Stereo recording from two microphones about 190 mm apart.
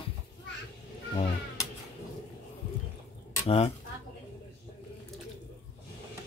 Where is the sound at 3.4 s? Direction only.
35° left (ahead or behind).